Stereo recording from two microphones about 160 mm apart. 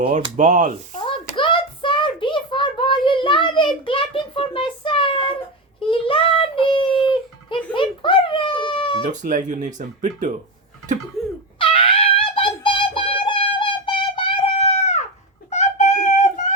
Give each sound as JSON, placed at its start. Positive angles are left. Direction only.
{"t": 0.0, "sound": "speech", "side_deg": -50}
{"t": 1.0, "sound": "hands", "side_deg": 30}
{"t": 5.9, "sound": "child singing", "side_deg": 35}
{"t": 9.0, "sound": "speech", "side_deg": -50}
{"t": 11.2, "sound": "laughter", "side_deg": 0}
{"t": 11.6, "sound": "wail", "side_deg": 35}
{"t": 15.4, "sound": "a sound", "side_deg": 45}